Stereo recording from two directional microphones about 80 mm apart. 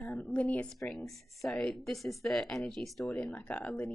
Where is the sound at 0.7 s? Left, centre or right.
Centre.